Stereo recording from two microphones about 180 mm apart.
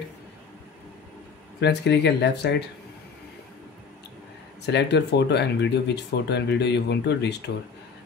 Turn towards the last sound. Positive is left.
turn(degrees=70)  # may be behind; listen again after turning